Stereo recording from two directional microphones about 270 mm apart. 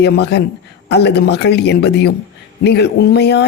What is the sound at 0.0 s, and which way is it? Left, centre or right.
A man's voice, left.